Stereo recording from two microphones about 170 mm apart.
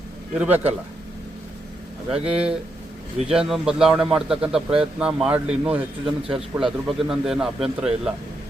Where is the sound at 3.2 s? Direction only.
5° right (ahead or behind).